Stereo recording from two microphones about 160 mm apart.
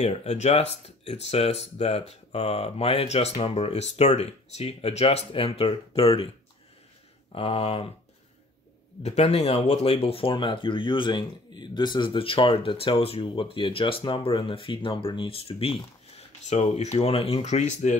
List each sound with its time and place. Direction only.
0.0 s speech: 40° left (ahead or behind)
7.3 s speech: 35° left (ahead or behind)
9.0 s speech: 40° left (ahead or behind)